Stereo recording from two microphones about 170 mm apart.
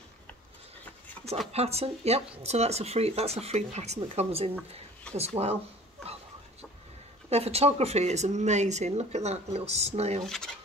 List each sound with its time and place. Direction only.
1.5 s speech: 40° right (ahead or behind)
7.2 s speech: 40° right (ahead or behind)
10.2 s speech: 5° left (ahead or behind)